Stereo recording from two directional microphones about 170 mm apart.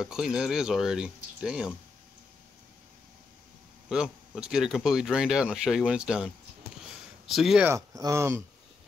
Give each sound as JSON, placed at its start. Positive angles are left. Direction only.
{"t": 0.0, "sound": "speech", "side_deg": -5}
{"t": 3.9, "sound": "speech", "side_deg": -5}
{"t": 7.7, "sound": "speech", "side_deg": -20}